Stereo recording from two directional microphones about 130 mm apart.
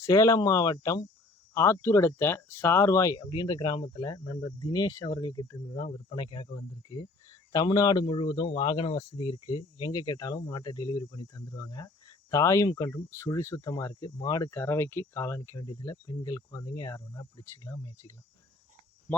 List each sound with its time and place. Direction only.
0.0 s a man's voice: 25° left (ahead or behind)
5.7 s a man's voice: 40° left (ahead or behind); by 18.1 s 25° left (ahead or behind)